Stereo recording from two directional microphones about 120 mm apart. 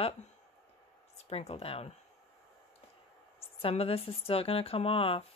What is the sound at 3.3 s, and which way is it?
Speech, 55° left (ahead or behind).